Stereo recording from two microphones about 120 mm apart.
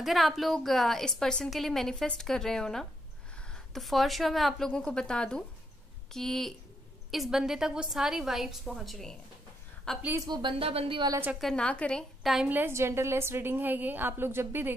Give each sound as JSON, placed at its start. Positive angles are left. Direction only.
{"t": 0.0, "sound": "a woman's voice", "side_deg": 0}
{"t": 10.2, "sound": "speech", "side_deg": -35}
{"t": 10.6, "sound": "a woman's voice", "side_deg": -55}
{"t": 11.3, "sound": "a woman's voice", "side_deg": 5}
{"t": 12.2, "sound": "a woman's voice", "side_deg": 0}
{"t": 12.4, "sound": "a woman's voice", "side_deg": -15}